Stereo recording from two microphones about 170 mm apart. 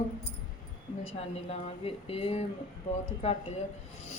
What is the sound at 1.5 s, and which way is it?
Speech, 35° left (ahead or behind).